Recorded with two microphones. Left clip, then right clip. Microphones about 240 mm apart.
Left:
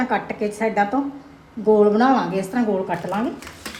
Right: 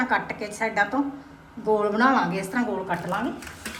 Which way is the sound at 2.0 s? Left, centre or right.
Centre.